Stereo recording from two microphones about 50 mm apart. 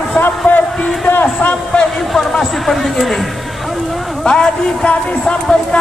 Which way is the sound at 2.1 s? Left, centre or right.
Centre.